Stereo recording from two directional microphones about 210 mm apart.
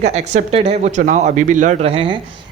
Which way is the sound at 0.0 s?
30° right (ahead or behind).